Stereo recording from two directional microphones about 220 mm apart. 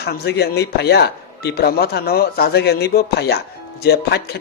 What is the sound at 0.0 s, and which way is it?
Speech, 45° left (ahead or behind).